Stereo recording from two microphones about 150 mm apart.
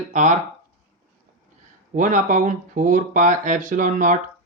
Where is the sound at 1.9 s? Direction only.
60° right (ahead or behind).